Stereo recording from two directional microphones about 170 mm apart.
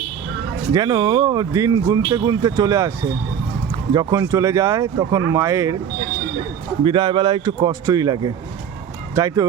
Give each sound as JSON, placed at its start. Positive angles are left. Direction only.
{"t": 0.7, "sound": "speech", "side_deg": -25}
{"t": 3.9, "sound": "speech", "side_deg": -20}
{"t": 6.8, "sound": "speech", "side_deg": -30}